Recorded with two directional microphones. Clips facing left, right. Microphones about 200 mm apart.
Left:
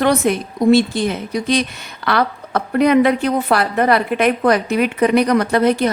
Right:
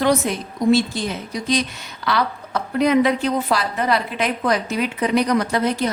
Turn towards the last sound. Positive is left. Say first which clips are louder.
# left 5 dB
turn(degrees=60)  # may be behind; listen again after turning